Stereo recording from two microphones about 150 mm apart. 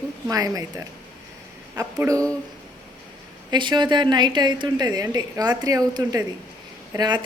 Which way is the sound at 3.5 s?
30° right (ahead or behind).